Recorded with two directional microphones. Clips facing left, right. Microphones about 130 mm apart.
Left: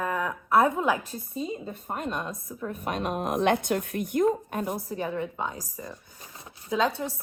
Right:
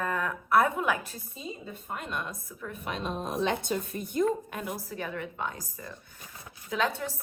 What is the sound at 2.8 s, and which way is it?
A woman's voice, 55° left (ahead or behind).